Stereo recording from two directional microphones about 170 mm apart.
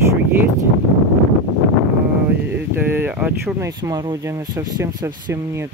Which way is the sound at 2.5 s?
10° right (ahead or behind).